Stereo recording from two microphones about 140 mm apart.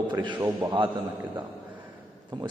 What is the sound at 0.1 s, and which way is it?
Speech, 35° right (ahead or behind).